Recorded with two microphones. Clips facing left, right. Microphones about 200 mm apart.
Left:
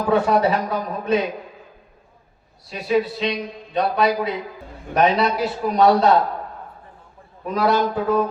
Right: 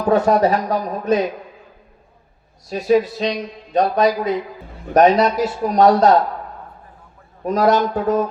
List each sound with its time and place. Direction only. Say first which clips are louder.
0.1 s a man's voice: right 3 dB; 40° right (ahead or behind)
2.6 s a man's voice: right 4 dB; 40° right (ahead or behind)
7.4 s a man's voice: right 3 dB; 45° right (ahead or behind)